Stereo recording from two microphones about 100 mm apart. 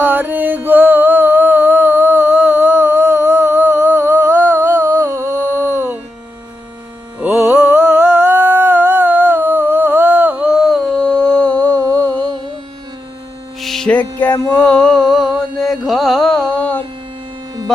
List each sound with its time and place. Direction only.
0.0 s music: 20° right (ahead or behind)
3.5 s humming: 15° right (ahead or behind)
5.6 s music: 20° right (ahead or behind)
7.2 s carnatic music: 25° right (ahead or behind)
7.5 s humming: 10° right (ahead or behind); by 11.8 s 15° left (ahead or behind)
13.6 s mains hum: centre (ahead or behind)
13.9 s a sound: 15° left (ahead or behind)
15.9 s carnatic music: centre (ahead or behind)